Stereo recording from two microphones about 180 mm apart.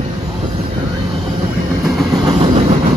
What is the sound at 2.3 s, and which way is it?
Train, 30° right (ahead or behind).